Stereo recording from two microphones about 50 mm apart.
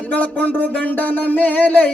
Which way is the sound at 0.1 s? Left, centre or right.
Left.